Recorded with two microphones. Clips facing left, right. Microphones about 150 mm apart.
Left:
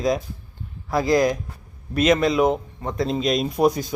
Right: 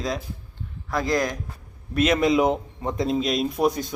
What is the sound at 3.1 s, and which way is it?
Speech, centre (ahead or behind).